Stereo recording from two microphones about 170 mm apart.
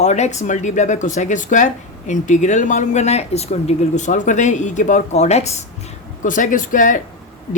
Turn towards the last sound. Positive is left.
turn(degrees=50)  # may be behind; listen again after turning